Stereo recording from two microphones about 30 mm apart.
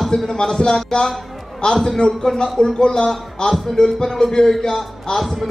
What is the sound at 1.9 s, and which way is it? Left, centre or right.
Speech, left.